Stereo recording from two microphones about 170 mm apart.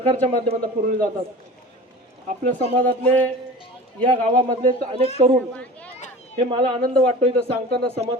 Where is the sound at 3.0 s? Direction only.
10° left (ahead or behind).